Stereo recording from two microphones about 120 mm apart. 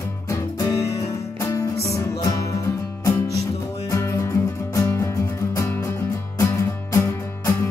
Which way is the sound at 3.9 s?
25° left (ahead or behind).